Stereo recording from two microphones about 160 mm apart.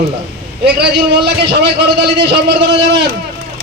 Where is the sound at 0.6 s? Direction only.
90° right.